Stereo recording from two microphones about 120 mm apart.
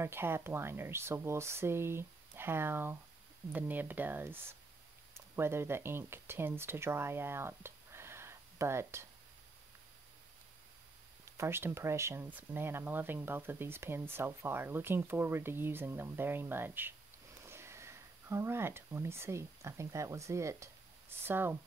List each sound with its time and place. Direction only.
0.0 s speech: 20° right (ahead or behind)
11.3 s speech: 20° right (ahead or behind)